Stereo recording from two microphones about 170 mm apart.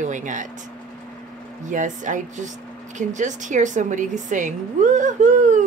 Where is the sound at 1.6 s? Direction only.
45° right (ahead or behind).